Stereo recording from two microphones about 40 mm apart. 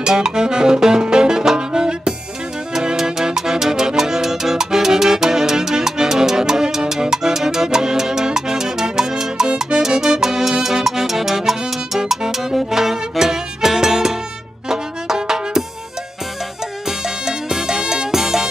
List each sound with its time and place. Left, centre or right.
0.0 s saxophone: centre
1.0 s music: centre
17.0 s music: centre